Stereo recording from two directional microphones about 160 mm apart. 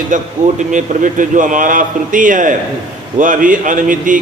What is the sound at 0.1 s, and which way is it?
A man's voice, 55° right (ahead or behind).